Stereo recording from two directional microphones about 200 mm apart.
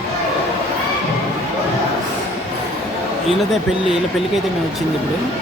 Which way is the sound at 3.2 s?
Centre (ahead or behind).